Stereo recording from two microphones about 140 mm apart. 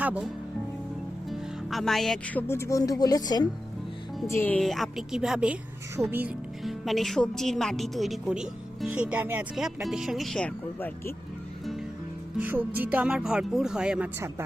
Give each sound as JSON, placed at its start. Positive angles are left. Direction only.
{"t": 0.0, "sound": "speech", "side_deg": -10}
{"t": 1.3, "sound": "speech", "side_deg": 0}
{"t": 4.3, "sound": "speech", "side_deg": 15}
{"t": 4.6, "sound": "speech", "side_deg": 0}
{"t": 6.6, "sound": "speech", "side_deg": 0}
{"t": 10.8, "sound": "speech", "side_deg": 15}
{"t": 11.6, "sound": "music", "side_deg": 0}
{"t": 12.4, "sound": "speech", "side_deg": -10}